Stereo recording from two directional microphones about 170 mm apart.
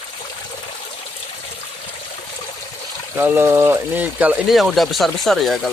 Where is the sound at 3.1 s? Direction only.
10° right (ahead or behind).